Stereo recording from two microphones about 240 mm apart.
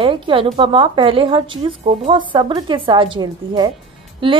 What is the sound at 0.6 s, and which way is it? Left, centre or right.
A woman's voice, centre.